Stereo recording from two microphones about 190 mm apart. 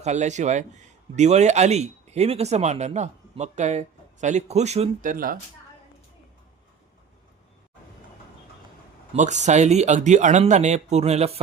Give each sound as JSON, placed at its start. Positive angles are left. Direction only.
{"t": 0.0, "sound": "speech", "side_deg": -40}
{"t": 5.1, "sound": "speech", "side_deg": -50}
{"t": 9.1, "sound": "speech", "side_deg": -40}